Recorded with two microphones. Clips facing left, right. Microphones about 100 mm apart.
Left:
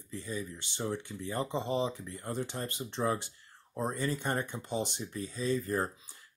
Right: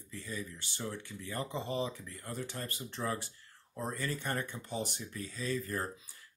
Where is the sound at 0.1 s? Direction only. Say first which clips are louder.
Left 4 dB; 20° left (ahead or behind).